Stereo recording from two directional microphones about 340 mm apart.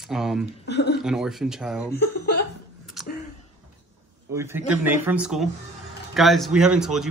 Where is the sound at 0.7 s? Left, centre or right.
Left.